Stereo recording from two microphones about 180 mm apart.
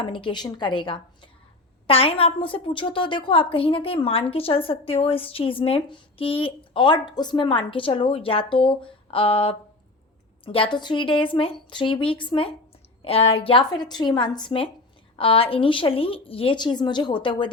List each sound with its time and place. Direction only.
0.0 s a woman's voice: 30° left (ahead or behind)